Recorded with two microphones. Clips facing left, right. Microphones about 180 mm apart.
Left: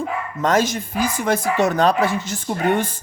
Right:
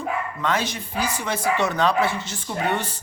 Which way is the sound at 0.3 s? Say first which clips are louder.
Left 10 dB; 45° left (ahead or behind).